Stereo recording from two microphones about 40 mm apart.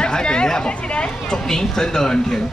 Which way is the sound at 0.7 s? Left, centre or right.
Left.